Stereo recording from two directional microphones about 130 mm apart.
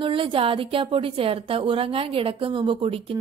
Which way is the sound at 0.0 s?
40° right (ahead or behind).